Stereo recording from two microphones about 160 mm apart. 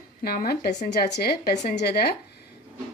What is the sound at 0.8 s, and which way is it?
Speech, 90° left.